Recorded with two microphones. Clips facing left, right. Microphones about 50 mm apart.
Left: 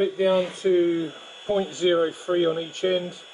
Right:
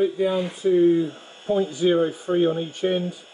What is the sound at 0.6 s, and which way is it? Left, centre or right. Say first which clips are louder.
Speech: right 2 dB; left.